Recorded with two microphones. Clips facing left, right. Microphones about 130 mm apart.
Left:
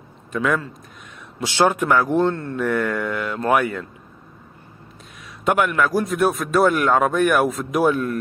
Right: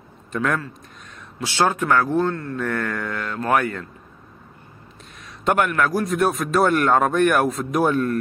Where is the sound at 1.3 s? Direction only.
20° left (ahead or behind).